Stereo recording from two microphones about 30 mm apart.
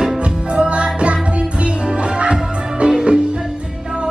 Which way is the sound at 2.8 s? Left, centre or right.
Right.